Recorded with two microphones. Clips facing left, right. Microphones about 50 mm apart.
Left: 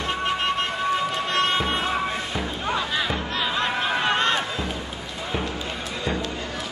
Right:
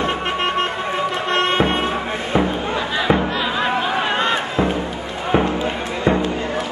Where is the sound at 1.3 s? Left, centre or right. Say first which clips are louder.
Right 6 dB; right.